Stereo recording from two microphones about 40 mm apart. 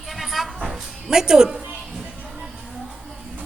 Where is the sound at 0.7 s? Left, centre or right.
Centre.